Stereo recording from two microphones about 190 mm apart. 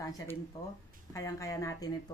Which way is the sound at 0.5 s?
15° left (ahead or behind).